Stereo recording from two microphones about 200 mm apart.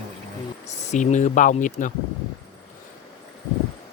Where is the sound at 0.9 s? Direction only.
35° left (ahead or behind).